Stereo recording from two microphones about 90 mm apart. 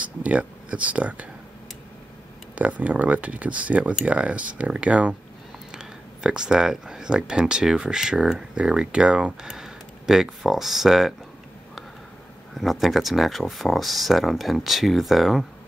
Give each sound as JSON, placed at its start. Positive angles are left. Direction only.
{"t": 0.0, "sound": "speech", "side_deg": -15}
{"t": 2.5, "sound": "speech", "side_deg": -15}
{"t": 12.5, "sound": "speech", "side_deg": 0}